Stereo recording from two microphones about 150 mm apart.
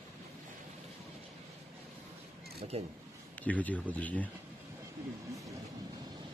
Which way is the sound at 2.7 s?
45° right (ahead or behind).